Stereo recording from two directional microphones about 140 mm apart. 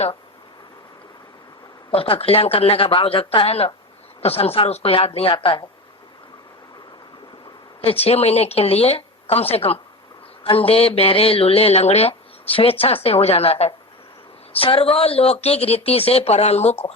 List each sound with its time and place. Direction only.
1.9 s speech: 40° left (ahead or behind)
7.8 s speech: 45° left (ahead or behind)